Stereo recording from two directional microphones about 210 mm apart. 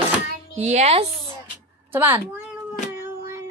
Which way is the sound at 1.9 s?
10° right (ahead or behind).